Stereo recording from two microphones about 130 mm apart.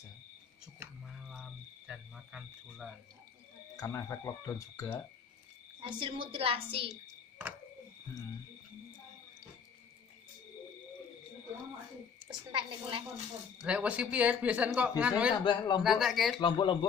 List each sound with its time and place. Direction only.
1.0 s a sound: centre (ahead or behind)
3.8 s speech: 25° left (ahead or behind)
5.8 s a woman's voice: 40° right (ahead or behind)
6.9 s a sound: 10° right (ahead or behind)
12.4 s a woman's voice: 40° right (ahead or behind)
13.6 s speech: 10° right (ahead or behind)
15.4 s speech: 35° left (ahead or behind)
15.8 s speech: 5° right (ahead or behind)
16.3 s speech: 40° left (ahead or behind)